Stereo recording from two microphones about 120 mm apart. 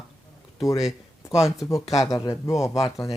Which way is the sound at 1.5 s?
25° left (ahead or behind).